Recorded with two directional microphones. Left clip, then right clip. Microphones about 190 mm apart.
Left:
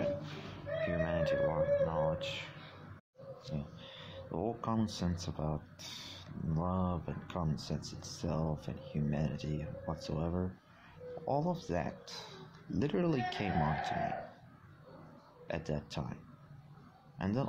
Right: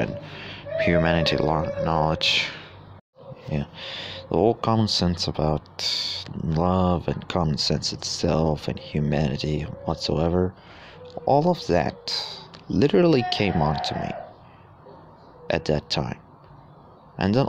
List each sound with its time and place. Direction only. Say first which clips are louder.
0.7 s speech: right 13 dB; 50° right (ahead or behind)
3.5 s speech: right 15 dB; 50° right (ahead or behind)
15.4 s speech: right 16 dB; 45° right (ahead or behind)
17.2 s speech: right 15 dB; 45° right (ahead or behind)